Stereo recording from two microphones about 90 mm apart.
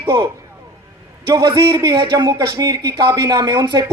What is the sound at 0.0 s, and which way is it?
Speech, 60° right (ahead or behind).